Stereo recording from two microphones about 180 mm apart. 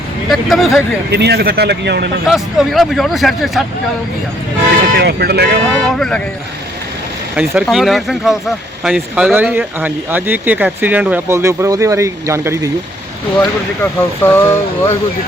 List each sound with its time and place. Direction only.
0.3 s speech: centre (ahead or behind)
1.1 s speech: 65° right (ahead or behind)
2.2 s speech: centre (ahead or behind)
4.9 s speech: 65° right (ahead or behind)
5.7 s speech: 5° left (ahead or behind)
7.3 s speech: 5° right (ahead or behind)
13.4 s speech: 10° left (ahead or behind)